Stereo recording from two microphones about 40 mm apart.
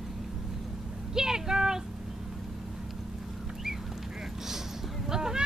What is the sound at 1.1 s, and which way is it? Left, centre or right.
Vehicle, centre.